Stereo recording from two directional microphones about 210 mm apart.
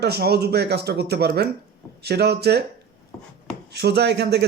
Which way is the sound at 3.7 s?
50° right (ahead or behind).